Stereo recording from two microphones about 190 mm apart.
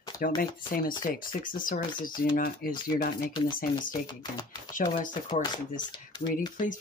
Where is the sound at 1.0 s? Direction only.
45° left (ahead or behind).